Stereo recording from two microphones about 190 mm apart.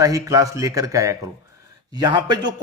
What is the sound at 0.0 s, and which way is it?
A man's voice, 15° right (ahead or behind).